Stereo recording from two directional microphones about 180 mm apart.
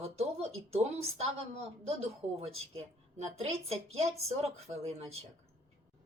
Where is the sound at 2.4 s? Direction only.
35° right (ahead or behind).